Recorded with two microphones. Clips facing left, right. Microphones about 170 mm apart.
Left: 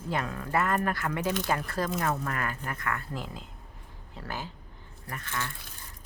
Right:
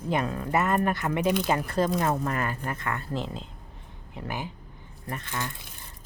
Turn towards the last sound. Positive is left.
turn(degrees=-20)  # may be behind; listen again after turning